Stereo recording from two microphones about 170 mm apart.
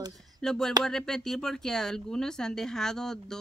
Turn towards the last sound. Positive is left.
turn(degrees=5)  # may be behind; listen again after turning